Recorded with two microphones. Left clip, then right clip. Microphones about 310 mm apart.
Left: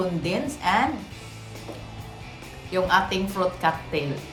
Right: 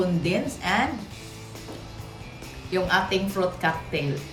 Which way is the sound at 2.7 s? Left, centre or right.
Centre.